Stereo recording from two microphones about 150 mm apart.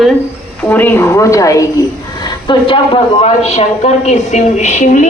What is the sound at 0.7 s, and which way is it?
Speech, 10° left (ahead or behind).